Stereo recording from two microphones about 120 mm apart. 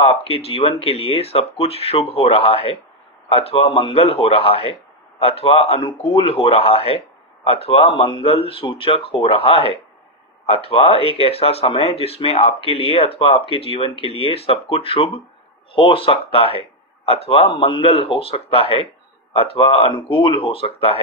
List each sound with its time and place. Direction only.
0.0 s speech: 55° left (ahead or behind)